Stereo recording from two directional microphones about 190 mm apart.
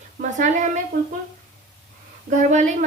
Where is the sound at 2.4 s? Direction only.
40° right (ahead or behind).